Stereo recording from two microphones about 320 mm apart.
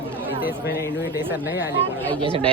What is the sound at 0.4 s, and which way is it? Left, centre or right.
Speech, left.